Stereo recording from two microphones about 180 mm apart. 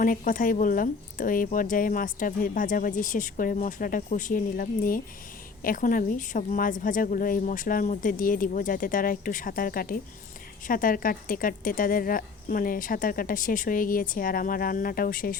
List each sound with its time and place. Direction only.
0.0 s speech: 50° left (ahead or behind)